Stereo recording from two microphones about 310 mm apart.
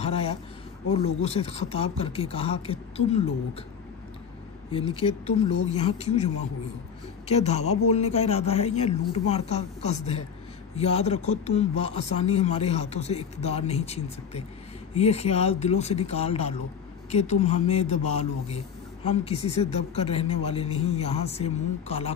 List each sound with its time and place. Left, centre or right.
0.0 s a sound: centre
0.9 s speech: centre
4.9 s speech: centre